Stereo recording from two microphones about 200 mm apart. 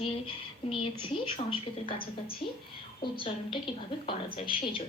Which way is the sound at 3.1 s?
25° left (ahead or behind).